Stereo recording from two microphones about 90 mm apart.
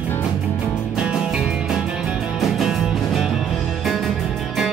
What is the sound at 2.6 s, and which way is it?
Music, centre (ahead or behind).